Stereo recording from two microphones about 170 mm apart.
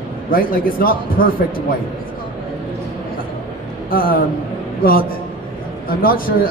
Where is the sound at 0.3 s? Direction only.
55° left (ahead or behind).